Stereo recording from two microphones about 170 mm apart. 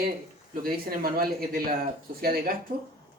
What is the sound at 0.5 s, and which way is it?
Speech, 60° right (ahead or behind).